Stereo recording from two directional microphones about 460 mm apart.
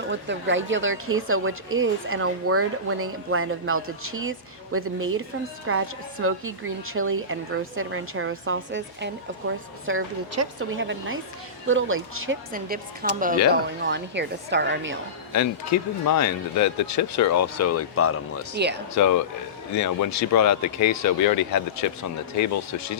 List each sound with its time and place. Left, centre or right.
0.1 s speech: right
15.7 s speech: left
18.5 s speech: right
18.9 s speech: left